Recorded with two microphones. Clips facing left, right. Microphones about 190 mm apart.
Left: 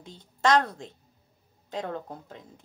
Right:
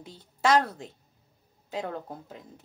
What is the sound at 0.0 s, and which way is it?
A woman's voice, 5° right (ahead or behind).